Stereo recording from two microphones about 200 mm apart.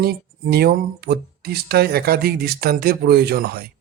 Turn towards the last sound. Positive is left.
turn(degrees=-50)  # may be behind; listen again after turning